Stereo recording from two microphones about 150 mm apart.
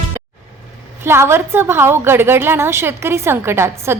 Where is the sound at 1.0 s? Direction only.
15° right (ahead or behind).